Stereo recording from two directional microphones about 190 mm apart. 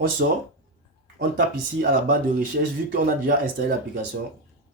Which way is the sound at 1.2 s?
45° right (ahead or behind).